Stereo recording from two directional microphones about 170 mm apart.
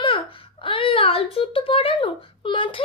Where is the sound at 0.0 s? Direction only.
30° left (ahead or behind).